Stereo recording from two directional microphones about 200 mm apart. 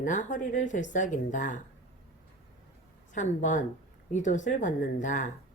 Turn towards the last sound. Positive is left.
turn(degrees=40)  # may be behind; listen again after turning